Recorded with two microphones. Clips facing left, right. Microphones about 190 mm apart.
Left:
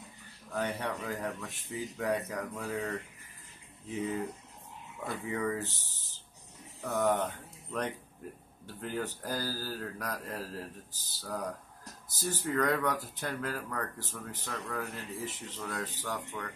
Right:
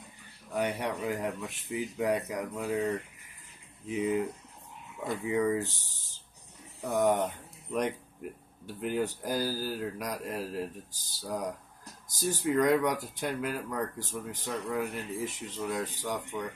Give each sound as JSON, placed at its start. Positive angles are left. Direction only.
{"t": 0.5, "sound": "speech", "side_deg": -15}
{"t": 5.0, "sound": "speech", "side_deg": -15}